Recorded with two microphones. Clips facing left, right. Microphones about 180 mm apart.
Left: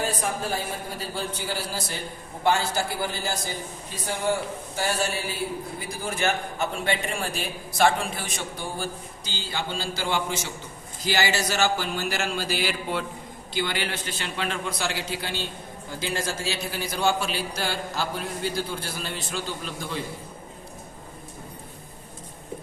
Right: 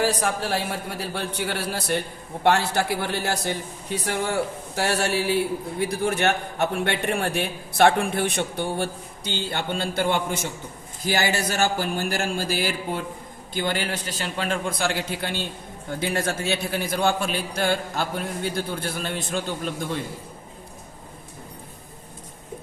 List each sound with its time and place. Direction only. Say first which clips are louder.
0.0 s a man's voice: right 4 dB; 80° right; by 19.7 s 50° right (ahead or behind)